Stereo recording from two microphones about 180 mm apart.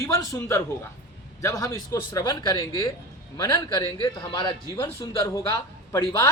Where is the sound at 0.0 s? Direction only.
20° left (ahead or behind).